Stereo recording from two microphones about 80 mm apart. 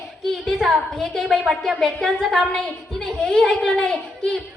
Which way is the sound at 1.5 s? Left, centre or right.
Centre.